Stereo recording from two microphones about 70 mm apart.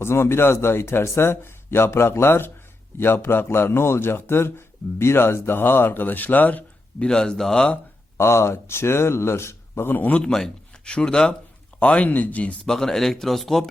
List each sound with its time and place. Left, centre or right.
0.0 s a man's voice: left
7.1 s speech: centre
8.2 s a man's voice: left
12.6 s speech: centre